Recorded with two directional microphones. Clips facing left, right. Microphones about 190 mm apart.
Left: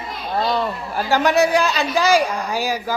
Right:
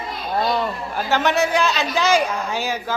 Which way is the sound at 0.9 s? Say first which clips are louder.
Left 3 dB; 10° left (ahead or behind).